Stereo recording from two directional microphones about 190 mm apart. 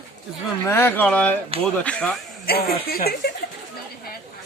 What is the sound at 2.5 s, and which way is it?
Speech, 55° left (ahead or behind).